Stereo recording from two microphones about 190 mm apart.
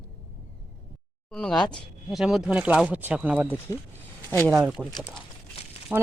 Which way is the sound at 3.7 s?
20° left (ahead or behind).